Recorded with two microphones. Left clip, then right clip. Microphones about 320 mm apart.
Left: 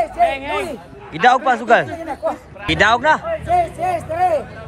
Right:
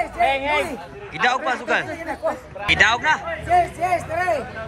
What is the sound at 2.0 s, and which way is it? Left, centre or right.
Speech, left.